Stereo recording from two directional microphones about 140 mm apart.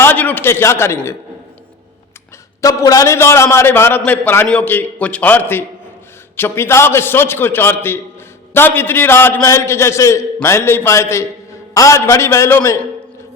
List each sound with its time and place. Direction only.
0.0 s a man's voice: 15° left (ahead or behind)
2.6 s a man's voice: 25° left (ahead or behind)